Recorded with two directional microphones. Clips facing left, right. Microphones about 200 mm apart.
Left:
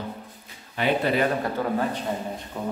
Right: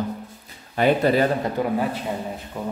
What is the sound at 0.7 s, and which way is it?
Speech, 45° right (ahead or behind).